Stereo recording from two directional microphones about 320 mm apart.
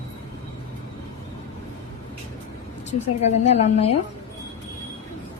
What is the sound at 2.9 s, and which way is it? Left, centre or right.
A woman's voice, left.